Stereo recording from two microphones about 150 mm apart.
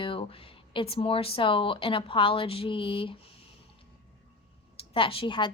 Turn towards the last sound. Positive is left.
turn(degrees=35)  # may be behind; listen again after turning